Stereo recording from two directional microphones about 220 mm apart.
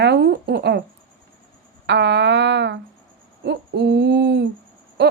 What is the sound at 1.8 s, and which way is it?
Speech, 55° right (ahead or behind).